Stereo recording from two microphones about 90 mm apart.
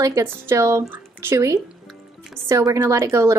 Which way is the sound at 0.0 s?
35° right (ahead or behind).